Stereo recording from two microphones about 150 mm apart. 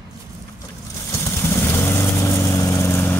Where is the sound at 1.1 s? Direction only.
20° left (ahead or behind).